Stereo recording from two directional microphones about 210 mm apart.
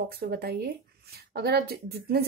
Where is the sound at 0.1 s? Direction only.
50° right (ahead or behind).